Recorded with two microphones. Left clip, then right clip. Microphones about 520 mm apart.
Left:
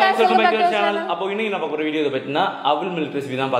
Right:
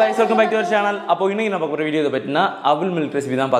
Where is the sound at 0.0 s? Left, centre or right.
Right.